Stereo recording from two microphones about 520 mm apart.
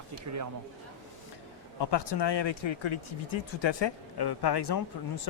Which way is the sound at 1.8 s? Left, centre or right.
Left.